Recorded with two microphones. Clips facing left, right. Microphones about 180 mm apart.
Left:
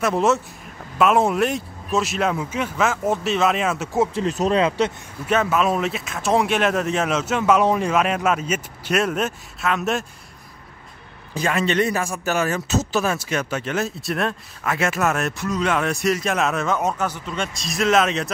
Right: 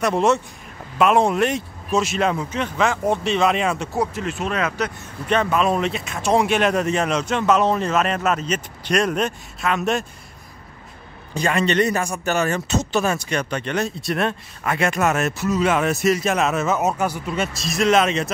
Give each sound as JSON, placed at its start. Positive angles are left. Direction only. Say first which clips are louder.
{"t": 0.0, "sound": "a man's voice", "louder": "right 1 dB", "side_deg": 0}
{"t": 3.9, "sound": "speech", "louder": "left 3 dB", "side_deg": 25}
{"t": 5.2, "sound": "a man's voice", "louder": "even", "side_deg": 5}
{"t": 11.3, "sound": "a man's voice", "louder": "right 1 dB", "side_deg": 0}